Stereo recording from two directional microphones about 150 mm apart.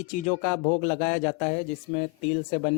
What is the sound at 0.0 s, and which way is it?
A man's voice, 55° left (ahead or behind).